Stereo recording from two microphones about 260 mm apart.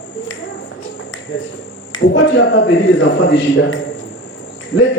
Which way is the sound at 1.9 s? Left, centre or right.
Left.